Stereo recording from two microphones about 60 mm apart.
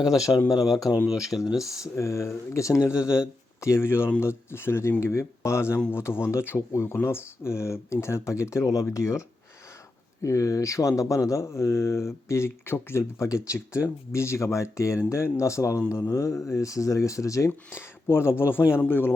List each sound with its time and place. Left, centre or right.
0.0 s speech: centre
1.5 s speech: left
2.9 s speech: centre
3.6 s speech: left
10.2 s speech: left
13.2 s speech: left
17.7 s speech: left